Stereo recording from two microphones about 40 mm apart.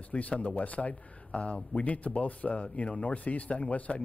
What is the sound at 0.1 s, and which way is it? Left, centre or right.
Speech, left.